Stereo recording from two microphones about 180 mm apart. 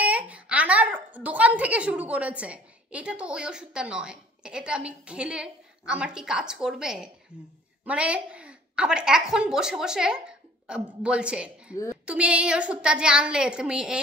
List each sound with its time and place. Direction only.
0.0 s a woman's voice: 10° right (ahead or behind)
11.7 s a woman's voice: 15° left (ahead or behind)
12.1 s a woman's voice: 5° right (ahead or behind)